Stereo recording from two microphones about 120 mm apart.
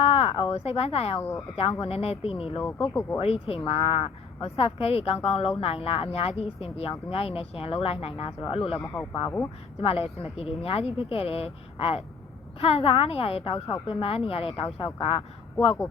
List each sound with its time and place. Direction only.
0.0 s a sound: 55° left (ahead or behind)
1.2 s speech: 20° left (ahead or behind)
1.8 s speech: 55° left (ahead or behind)
2.6 s speech: 15° left (ahead or behind)
3.2 s speech: 55° left (ahead or behind)
8.8 s speech: 20° left (ahead or behind)
9.8 s speech: 55° left (ahead or behind)